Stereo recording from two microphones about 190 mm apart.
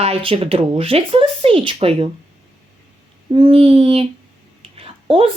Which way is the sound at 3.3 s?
30° right (ahead or behind).